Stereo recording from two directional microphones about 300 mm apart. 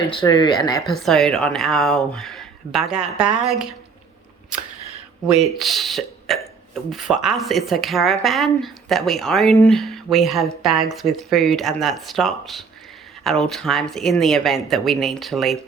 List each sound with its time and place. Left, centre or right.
0.1 s speech: centre
0.9 s speech: centre
5.4 s speech: centre